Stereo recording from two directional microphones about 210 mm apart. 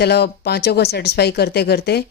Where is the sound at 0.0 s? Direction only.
50° left (ahead or behind).